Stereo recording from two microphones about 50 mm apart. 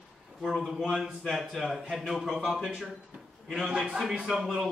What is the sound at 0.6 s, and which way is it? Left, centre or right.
A man's voice, centre.